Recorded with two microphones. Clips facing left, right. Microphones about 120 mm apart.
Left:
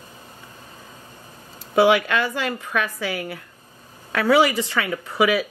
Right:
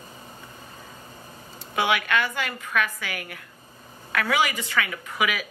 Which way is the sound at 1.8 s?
30° left (ahead or behind).